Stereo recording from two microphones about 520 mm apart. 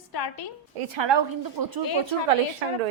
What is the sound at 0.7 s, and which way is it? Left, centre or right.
A woman's voice, right.